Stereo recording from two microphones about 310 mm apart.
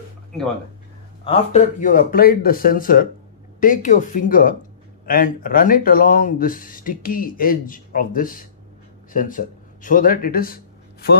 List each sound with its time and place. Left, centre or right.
1.2 s speech: centre